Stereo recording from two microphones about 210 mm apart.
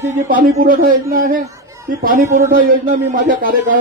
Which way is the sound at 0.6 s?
40° right (ahead or behind).